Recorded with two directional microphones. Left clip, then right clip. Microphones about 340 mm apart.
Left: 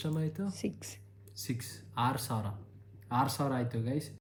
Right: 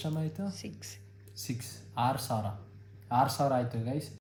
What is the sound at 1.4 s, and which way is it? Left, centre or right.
Speech, centre.